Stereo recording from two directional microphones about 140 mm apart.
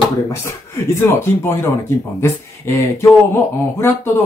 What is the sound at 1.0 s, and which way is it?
Speech, 15° left (ahead or behind).